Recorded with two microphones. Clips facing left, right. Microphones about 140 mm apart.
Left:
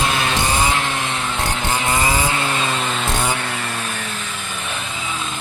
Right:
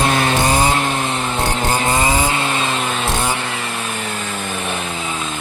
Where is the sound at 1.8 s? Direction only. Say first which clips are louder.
Even; 30° right (ahead or behind); by 4.0 s 10° right (ahead or behind).